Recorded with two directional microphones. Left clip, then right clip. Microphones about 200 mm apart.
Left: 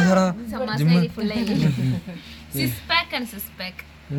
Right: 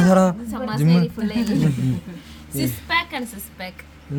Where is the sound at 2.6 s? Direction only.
10° left (ahead or behind).